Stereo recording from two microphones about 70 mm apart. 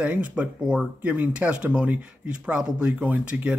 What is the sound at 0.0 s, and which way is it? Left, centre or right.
Speech, right.